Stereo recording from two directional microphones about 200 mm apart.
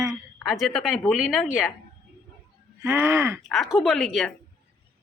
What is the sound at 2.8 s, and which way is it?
Speech, 10° right (ahead or behind).